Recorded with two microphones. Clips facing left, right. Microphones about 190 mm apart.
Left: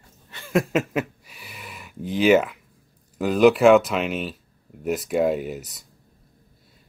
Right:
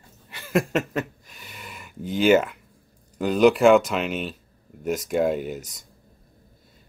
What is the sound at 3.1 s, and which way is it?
Speech, centre (ahead or behind).